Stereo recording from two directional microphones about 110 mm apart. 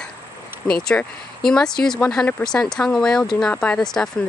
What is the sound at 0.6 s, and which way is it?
Speech, 5° left (ahead or behind).